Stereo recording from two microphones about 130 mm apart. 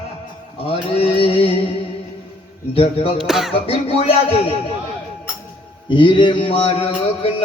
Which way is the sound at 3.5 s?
45° left (ahead or behind).